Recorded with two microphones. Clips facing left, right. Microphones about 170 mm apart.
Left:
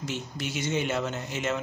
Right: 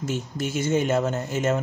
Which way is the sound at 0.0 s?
45° right (ahead or behind).